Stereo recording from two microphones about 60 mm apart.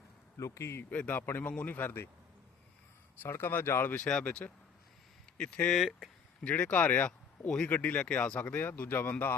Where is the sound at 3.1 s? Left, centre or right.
Left.